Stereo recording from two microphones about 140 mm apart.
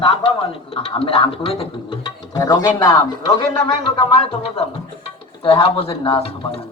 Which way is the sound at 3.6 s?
40° left (ahead or behind).